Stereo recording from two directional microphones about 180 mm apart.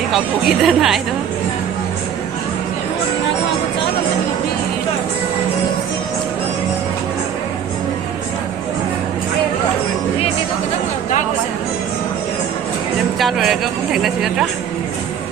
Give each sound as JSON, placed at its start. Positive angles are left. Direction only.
{"t": 0.1, "sound": "speech", "side_deg": 0}
{"t": 13.1, "sound": "speech", "side_deg": 0}